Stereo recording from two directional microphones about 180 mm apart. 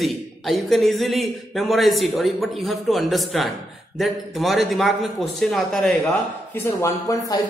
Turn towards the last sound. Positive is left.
turn(degrees=15)  # may be behind; listen again after turning